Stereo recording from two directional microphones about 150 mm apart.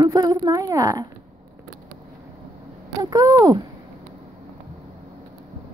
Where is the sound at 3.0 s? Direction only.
25° right (ahead or behind).